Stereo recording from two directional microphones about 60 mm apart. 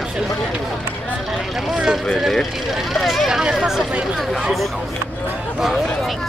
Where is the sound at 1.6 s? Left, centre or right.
Centre.